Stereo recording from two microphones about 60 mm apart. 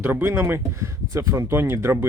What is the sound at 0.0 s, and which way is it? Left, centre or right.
Speech, right.